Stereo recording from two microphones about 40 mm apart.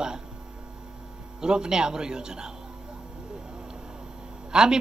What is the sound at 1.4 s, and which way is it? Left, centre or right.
A woman's voice, centre.